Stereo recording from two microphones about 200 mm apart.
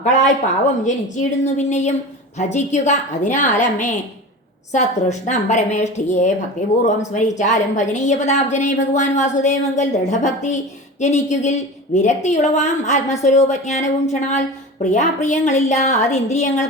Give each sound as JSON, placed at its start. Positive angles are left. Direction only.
{"t": 1.1, "sound": "a woman's voice", "side_deg": 35}